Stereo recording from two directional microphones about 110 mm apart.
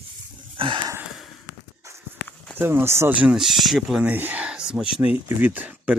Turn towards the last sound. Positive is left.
turn(degrees=-15)  # may be behind; listen again after turning